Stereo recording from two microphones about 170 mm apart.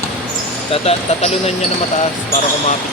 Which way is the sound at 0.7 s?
35° left (ahead or behind).